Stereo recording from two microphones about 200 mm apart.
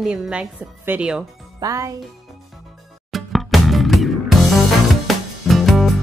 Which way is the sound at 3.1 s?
Centre (ahead or behind).